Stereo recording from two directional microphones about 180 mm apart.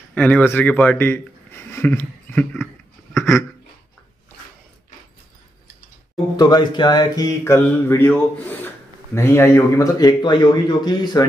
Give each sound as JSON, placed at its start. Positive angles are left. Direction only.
{"t": 0.1, "sound": "speech", "side_deg": 10}
{"t": 6.3, "sound": "mantra", "side_deg": 20}